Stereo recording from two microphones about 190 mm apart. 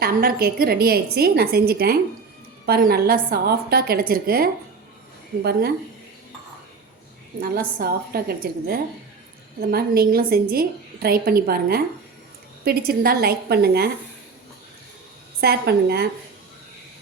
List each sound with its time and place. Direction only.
0.0 s a woman's voice: 50° right (ahead or behind)
7.4 s a woman's voice: 50° right (ahead or behind)
15.4 s a woman's voice: 55° right (ahead or behind)